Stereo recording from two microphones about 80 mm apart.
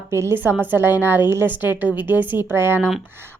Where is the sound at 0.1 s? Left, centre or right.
Right.